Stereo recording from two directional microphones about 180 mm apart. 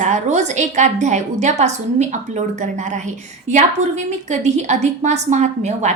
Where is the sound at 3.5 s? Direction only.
40° right (ahead or behind).